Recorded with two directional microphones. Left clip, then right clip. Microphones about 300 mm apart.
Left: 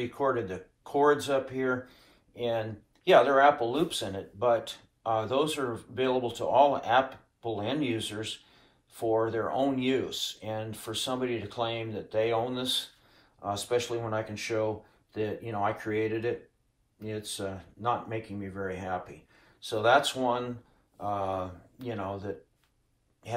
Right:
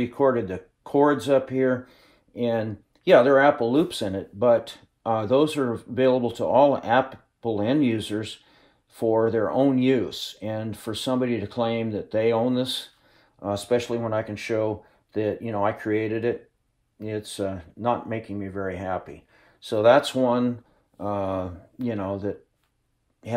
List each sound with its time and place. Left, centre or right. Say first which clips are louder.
0.0 s speech: right 7 dB; right